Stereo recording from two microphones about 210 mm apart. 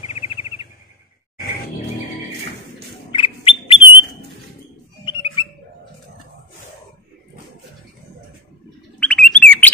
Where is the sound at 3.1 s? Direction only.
25° left (ahead or behind).